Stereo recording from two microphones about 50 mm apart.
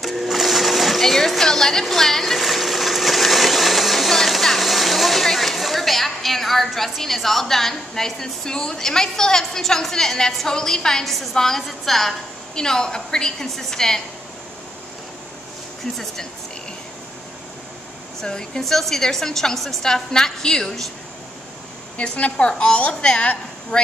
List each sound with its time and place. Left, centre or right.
0.0 s a sound: centre
11.3 s a woman's voice: centre
12.5 s a woman's voice: centre
18.2 s a woman's voice: centre
21.9 s a woman's voice: left